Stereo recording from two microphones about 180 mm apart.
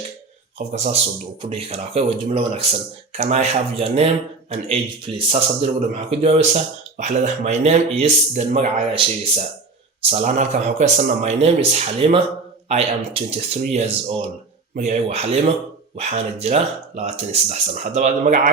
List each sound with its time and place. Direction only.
0.7 s speech: 40° right (ahead or behind)